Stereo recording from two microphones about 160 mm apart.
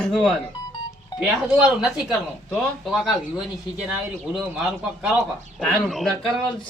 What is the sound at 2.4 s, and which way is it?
Speech, 5° left (ahead or behind).